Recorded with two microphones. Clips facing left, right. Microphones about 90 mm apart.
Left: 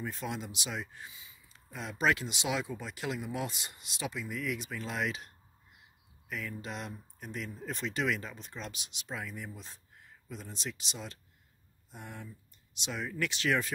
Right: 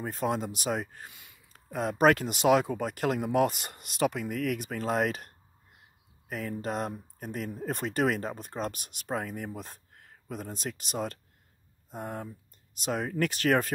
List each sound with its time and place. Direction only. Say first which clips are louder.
0.0 s speech: right 8 dB; 45° right (ahead or behind)